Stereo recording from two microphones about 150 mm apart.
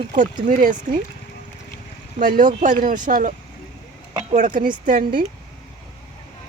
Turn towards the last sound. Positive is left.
turn(degrees=-70)  # may be behind; listen again after turning